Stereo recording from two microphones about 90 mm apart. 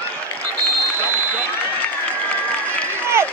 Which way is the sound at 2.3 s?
15° left (ahead or behind).